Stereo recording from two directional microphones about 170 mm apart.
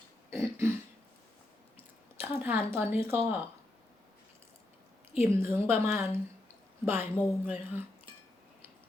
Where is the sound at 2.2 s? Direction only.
10° right (ahead or behind).